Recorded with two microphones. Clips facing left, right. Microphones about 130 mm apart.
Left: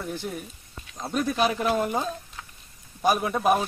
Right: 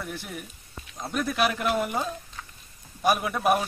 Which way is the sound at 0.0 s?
30° left (ahead or behind).